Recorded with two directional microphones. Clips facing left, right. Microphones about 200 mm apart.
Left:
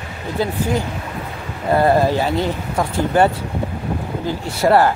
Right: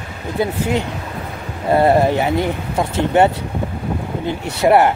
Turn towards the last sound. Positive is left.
turn(degrees=-20)  # may be behind; listen again after turning